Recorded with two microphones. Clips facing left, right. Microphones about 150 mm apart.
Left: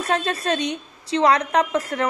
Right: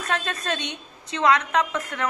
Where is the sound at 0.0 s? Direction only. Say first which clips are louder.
Left 5 dB; 30° left (ahead or behind).